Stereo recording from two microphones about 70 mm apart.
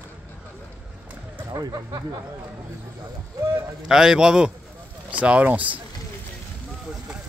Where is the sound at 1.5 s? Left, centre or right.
Right.